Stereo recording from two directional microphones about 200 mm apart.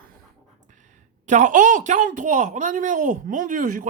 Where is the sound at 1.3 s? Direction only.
40° right (ahead or behind).